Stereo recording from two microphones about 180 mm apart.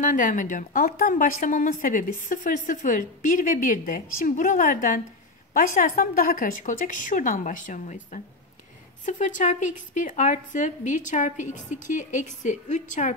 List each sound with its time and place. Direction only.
0.0 s a woman's voice: 45° left (ahead or behind)